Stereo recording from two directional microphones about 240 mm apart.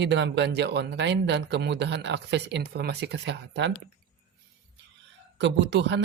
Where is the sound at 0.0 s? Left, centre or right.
Right.